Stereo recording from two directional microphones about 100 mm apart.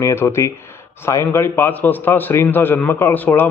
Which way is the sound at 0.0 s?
25° left (ahead or behind).